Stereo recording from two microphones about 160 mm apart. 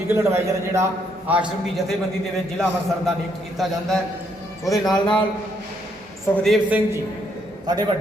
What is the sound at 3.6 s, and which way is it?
A man's voice, centre (ahead or behind).